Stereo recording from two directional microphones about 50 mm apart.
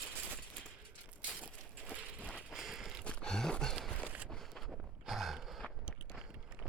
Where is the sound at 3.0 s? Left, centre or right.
Centre.